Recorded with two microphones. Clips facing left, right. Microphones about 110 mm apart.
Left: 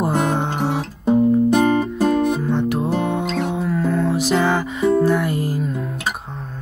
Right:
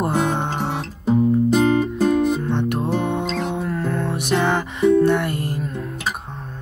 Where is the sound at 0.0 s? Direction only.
Centre (ahead or behind).